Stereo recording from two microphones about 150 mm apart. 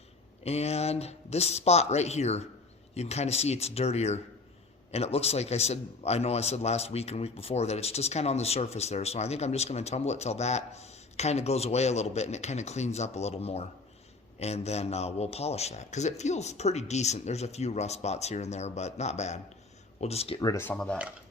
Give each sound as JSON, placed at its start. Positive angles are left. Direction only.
{"t": 0.4, "sound": "a man's voice", "side_deg": 45}
{"t": 20.4, "sound": "speech", "side_deg": 20}
{"t": 20.7, "sound": "speech", "side_deg": 5}